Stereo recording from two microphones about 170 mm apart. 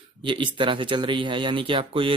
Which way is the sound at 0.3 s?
30° right (ahead or behind).